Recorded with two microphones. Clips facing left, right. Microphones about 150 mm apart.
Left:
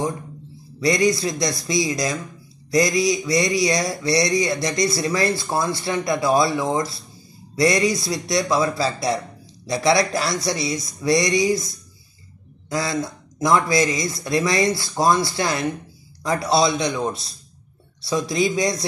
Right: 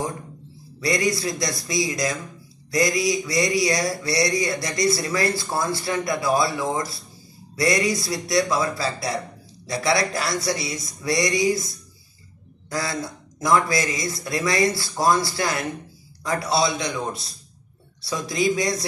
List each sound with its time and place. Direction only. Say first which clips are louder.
0.7 s speech: left 4 dB; 20° left (ahead or behind)
12.6 s speech: left 4 dB; 20° left (ahead or behind)